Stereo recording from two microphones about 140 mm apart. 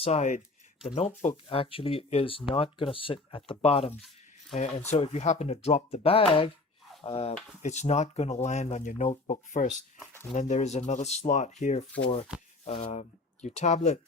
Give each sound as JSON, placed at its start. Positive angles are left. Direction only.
{"t": 0.0, "sound": "speech", "side_deg": 55}
{"t": 1.5, "sound": "speech", "side_deg": 40}